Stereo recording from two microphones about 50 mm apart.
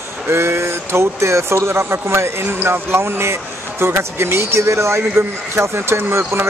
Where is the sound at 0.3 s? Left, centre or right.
Right.